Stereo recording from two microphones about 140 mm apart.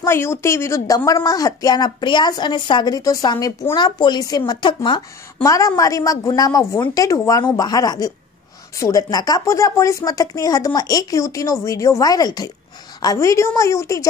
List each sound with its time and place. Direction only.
0.0 s a woman's voice: 20° left (ahead or behind); by 5.0 s 35° left (ahead or behind)
5.4 s a woman's voice: 25° left (ahead or behind)